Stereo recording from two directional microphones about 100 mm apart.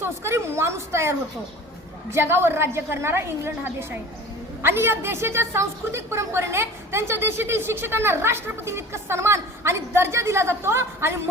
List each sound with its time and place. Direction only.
0.0 s a woman's voice: 25° right (ahead or behind)
2.1 s a woman's voice: 25° right (ahead or behind)